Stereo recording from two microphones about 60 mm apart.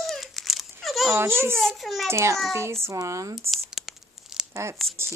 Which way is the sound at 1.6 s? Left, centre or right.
Centre.